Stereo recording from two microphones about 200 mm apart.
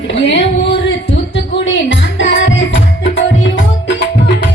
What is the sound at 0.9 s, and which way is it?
Music, 65° left (ahead or behind).